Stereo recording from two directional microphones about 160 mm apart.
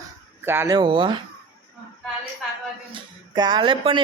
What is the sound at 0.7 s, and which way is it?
Speech, 30° right (ahead or behind).